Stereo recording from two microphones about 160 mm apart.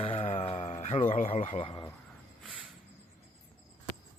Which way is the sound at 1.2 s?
40° left (ahead or behind).